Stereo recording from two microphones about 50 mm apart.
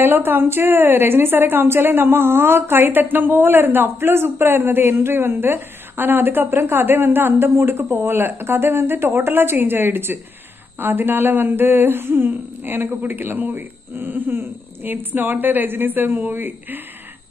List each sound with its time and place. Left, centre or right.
0.0 s a woman's voice: right